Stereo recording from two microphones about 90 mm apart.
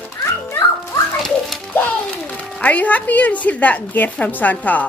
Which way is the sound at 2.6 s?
15° left (ahead or behind).